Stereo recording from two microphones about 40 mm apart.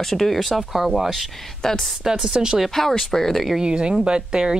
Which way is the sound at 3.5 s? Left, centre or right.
Right.